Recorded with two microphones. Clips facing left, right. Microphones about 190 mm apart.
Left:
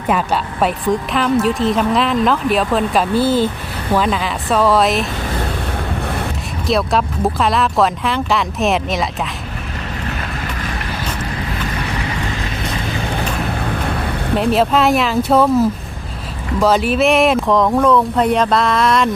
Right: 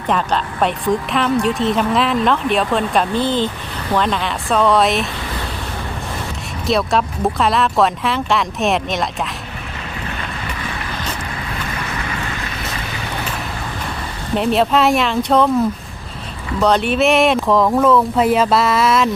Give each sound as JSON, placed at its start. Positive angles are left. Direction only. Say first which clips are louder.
{"t": 0.1, "sound": "speech", "louder": "left 1 dB", "side_deg": 5}
{"t": 6.7, "sound": "speech", "louder": "even", "side_deg": 0}
{"t": 13.6, "sound": "vehicle", "louder": "left 6 dB", "side_deg": 55}
{"t": 14.3, "sound": "speech", "louder": "even", "side_deg": 0}